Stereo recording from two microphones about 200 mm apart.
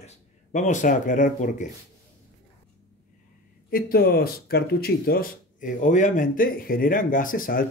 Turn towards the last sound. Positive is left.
turn(degrees=45)  # may be behind; listen again after turning